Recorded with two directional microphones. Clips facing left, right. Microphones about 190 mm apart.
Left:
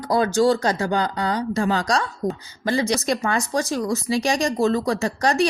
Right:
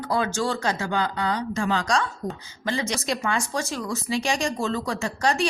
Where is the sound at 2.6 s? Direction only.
35° left (ahead or behind).